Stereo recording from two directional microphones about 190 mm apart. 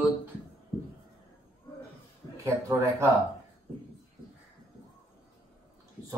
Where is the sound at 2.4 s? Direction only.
15° right (ahead or behind).